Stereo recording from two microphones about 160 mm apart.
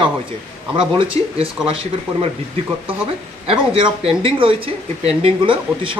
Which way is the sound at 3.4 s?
35° right (ahead or behind).